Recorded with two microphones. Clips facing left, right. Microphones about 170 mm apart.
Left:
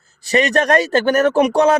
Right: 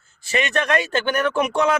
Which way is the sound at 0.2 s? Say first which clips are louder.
Left 7 dB; 40° left (ahead or behind).